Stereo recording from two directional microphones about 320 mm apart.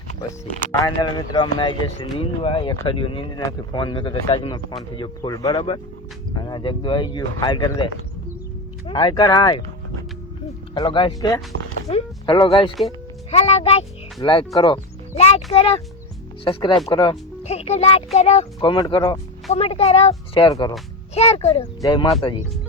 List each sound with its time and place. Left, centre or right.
1.1 s speech: centre
8.9 s speech: centre